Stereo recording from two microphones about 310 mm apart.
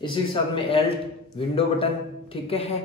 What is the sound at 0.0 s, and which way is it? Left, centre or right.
Speech, centre.